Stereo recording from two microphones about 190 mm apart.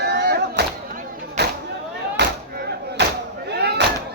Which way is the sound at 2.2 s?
65° right (ahead or behind).